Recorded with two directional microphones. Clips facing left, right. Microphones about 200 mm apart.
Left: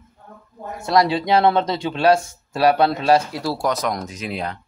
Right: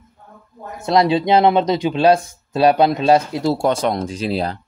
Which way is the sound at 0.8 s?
20° right (ahead or behind).